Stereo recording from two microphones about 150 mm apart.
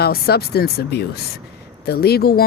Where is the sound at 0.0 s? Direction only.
90° left.